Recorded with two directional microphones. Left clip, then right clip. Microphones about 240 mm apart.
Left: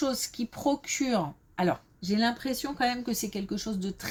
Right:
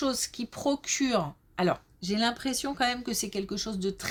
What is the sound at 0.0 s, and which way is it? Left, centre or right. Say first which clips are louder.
Speech: even; right.